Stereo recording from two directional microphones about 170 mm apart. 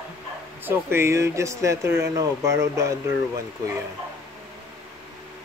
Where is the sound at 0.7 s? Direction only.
15° right (ahead or behind).